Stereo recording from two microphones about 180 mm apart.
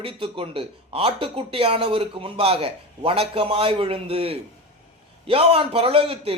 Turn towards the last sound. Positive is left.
turn(degrees=-30)  # may be behind; listen again after turning